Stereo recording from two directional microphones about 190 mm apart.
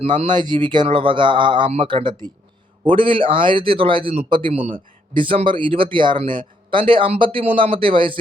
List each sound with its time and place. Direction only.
0.0 s speech: 30° right (ahead or behind)